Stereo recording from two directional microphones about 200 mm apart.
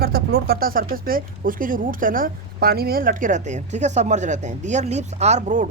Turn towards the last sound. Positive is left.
turn(degrees=-35)  # may be behind; listen again after turning